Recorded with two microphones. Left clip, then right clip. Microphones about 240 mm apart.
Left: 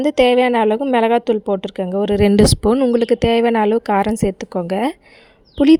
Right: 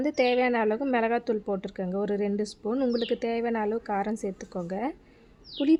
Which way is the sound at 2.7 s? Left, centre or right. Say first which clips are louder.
Left 12 dB; left.